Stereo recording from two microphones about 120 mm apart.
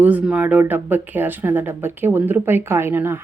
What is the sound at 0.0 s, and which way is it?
Speech, 15° right (ahead or behind).